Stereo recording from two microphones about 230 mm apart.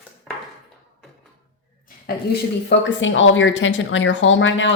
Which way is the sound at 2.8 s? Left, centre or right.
Left.